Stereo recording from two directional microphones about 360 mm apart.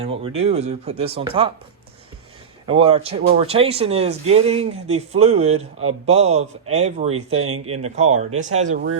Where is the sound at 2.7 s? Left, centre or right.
Centre.